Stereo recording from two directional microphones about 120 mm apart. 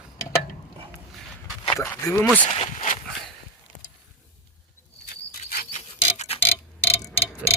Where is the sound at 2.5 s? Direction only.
75° left (ahead or behind).